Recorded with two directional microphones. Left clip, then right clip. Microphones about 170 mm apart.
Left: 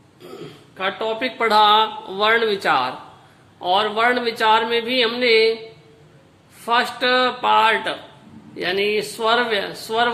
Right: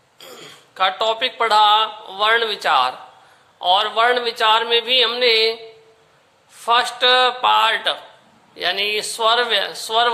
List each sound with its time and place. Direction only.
0.8 s speech: 30° right (ahead or behind)
1.4 s speech: 10° right (ahead or behind)
6.7 s speech: 15° right (ahead or behind)